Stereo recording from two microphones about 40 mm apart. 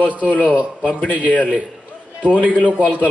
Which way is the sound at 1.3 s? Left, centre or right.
Left.